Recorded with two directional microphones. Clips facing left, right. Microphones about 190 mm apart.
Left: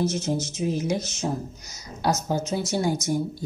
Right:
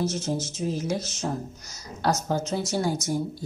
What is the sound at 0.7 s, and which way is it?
Speech, 15° left (ahead or behind).